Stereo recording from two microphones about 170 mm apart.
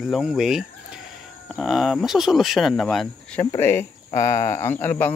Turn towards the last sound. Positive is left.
turn(degrees=10)  # may be behind; listen again after turning